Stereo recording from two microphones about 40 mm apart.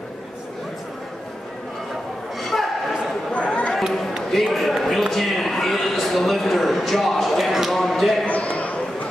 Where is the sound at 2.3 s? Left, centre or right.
Centre.